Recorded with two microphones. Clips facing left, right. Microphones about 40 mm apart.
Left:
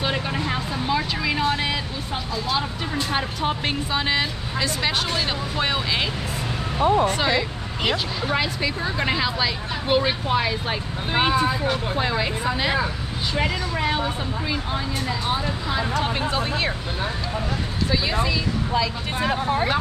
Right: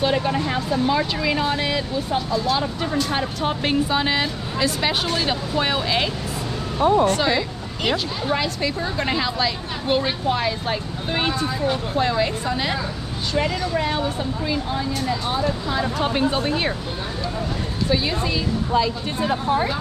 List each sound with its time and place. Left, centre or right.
0.0 s speech: centre
7.1 s speech: centre
19.1 s speech: left